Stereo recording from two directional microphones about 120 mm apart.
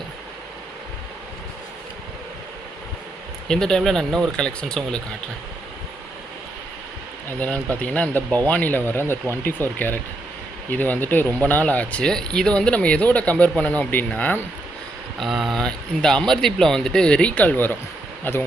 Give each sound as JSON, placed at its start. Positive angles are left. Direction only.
{"t": 3.5, "sound": "speech", "side_deg": 5}
{"t": 7.3, "sound": "speech", "side_deg": 10}
{"t": 15.2, "sound": "speech", "side_deg": 0}